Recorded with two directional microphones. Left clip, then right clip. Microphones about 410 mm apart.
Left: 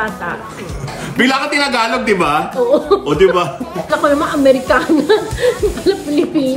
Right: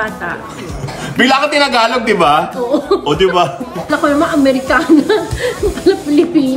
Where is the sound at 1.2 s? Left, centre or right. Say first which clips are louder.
Right 3 dB; centre.